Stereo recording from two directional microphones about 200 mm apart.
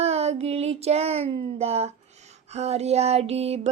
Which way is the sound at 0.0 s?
30° right (ahead or behind).